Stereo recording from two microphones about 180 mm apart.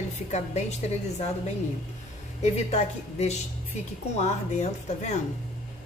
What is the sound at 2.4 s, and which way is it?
A woman's voice, 40° left (ahead or behind).